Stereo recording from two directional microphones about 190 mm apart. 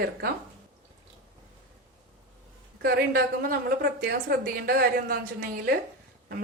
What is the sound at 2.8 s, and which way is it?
A woman's voice, 55° right (ahead or behind).